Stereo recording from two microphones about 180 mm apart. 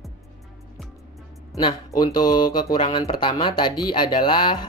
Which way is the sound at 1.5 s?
20° left (ahead or behind).